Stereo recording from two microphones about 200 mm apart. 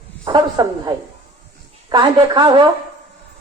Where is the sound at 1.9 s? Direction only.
20° right (ahead or behind).